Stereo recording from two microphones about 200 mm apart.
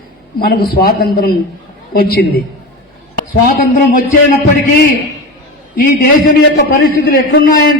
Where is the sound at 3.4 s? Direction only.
45° left (ahead or behind).